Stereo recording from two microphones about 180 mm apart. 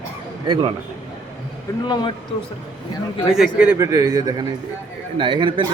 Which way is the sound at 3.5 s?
5° right (ahead or behind).